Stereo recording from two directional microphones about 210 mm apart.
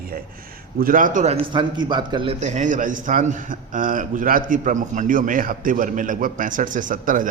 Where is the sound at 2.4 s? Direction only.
35° right (ahead or behind).